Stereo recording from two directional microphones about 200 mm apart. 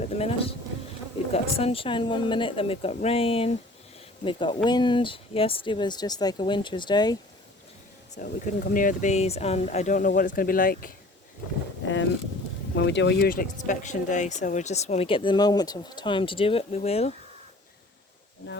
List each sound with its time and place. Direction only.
0.2 s speech: 30° left (ahead or behind)
8.1 s speech: 40° left (ahead or behind)
11.8 s speech: 65° left (ahead or behind); by 17.2 s 30° left (ahead or behind)